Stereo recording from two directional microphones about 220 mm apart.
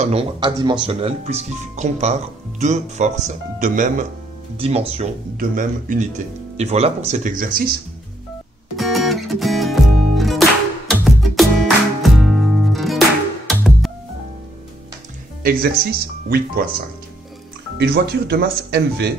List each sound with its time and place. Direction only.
0.0 s speech: 25° right (ahead or behind)
8.7 s music: centre (ahead or behind)
15.4 s speech: 45° right (ahead or behind)
17.7 s speech: 45° right (ahead or behind)